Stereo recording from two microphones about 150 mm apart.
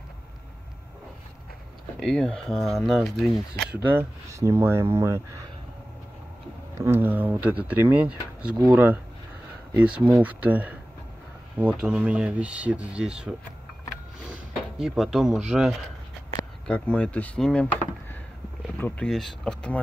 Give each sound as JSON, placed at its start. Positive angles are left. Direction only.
{"t": 2.0, "sound": "speech", "side_deg": 5}
{"t": 3.6, "sound": "speech", "side_deg": -15}
{"t": 6.8, "sound": "speech", "side_deg": -15}
{"t": 16.6, "sound": "speech", "side_deg": 5}
{"t": 18.8, "sound": "speech", "side_deg": 15}
{"t": 19.0, "sound": "speech", "side_deg": 0}